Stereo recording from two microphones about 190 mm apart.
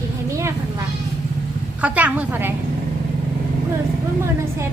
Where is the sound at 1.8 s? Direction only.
5° right (ahead or behind).